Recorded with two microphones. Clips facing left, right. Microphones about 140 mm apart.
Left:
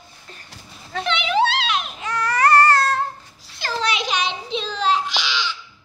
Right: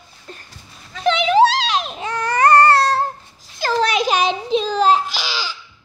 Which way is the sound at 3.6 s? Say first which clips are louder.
Right 6 dB; 45° right (ahead or behind).